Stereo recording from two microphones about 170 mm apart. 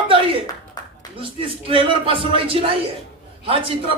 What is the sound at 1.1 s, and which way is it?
A man's voice, 30° right (ahead or behind).